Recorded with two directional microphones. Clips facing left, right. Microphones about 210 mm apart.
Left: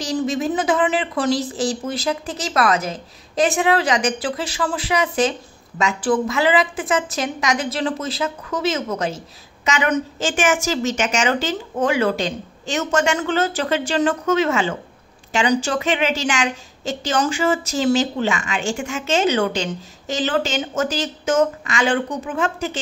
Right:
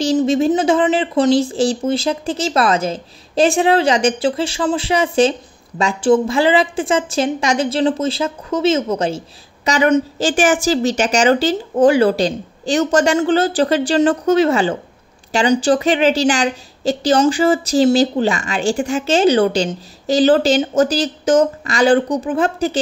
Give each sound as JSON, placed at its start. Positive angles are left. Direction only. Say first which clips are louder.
{"t": 0.0, "sound": "a woman's voice", "louder": "right 7 dB", "side_deg": -30}